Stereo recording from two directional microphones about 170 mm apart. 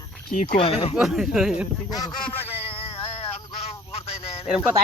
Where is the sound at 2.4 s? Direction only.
35° left (ahead or behind).